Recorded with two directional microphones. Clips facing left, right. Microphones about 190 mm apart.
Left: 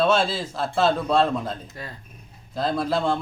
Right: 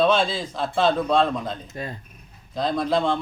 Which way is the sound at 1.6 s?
20° right (ahead or behind).